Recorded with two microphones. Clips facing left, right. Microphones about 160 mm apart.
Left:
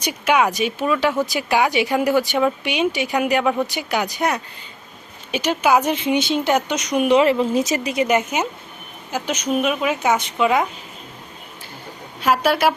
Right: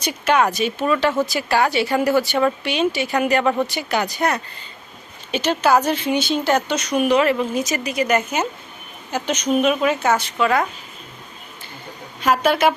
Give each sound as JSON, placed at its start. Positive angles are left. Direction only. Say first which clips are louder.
{"t": 0.0, "sound": "speech", "louder": "even", "side_deg": 10}
{"t": 12.2, "sound": "speech", "louder": "right 1 dB", "side_deg": 5}